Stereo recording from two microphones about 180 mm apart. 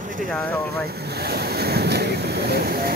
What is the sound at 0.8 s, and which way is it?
Ocean, 60° right (ahead or behind).